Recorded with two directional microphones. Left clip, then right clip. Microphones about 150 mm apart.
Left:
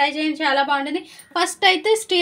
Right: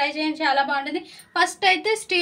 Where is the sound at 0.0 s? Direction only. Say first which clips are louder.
Left 3 dB; 65° left (ahead or behind).